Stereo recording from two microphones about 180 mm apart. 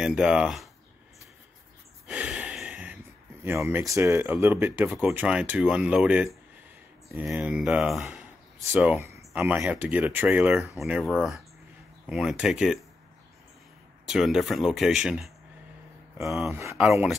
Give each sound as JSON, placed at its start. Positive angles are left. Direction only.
{"t": 0.0, "sound": "speech", "side_deg": -5}
{"t": 2.0, "sound": "a sound", "side_deg": -5}
{"t": 3.6, "sound": "speech", "side_deg": -15}
{"t": 14.0, "sound": "speech", "side_deg": 0}
{"t": 16.4, "sound": "speech", "side_deg": -15}